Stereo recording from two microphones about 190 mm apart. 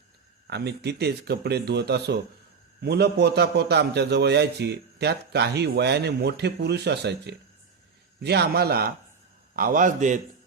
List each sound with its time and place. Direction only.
0.4 s a man's voice: 60° right (ahead or behind); by 10.2 s 40° right (ahead or behind)